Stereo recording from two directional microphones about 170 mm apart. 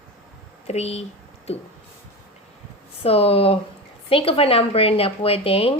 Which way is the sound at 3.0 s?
35° left (ahead or behind).